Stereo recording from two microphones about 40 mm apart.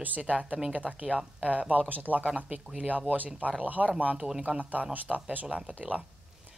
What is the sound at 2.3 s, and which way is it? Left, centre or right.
Speech, centre.